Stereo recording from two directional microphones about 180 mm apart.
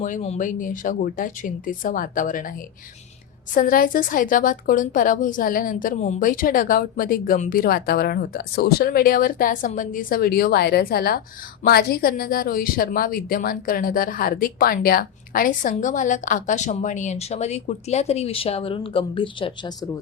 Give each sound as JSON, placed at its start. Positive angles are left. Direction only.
{"t": 0.0, "sound": "a woman's voice", "side_deg": 40}